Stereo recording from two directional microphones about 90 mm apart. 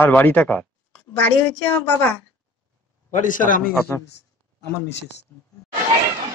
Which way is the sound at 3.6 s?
20° left (ahead or behind).